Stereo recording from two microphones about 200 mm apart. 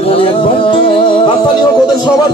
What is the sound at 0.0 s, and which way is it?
Music, 30° left (ahead or behind).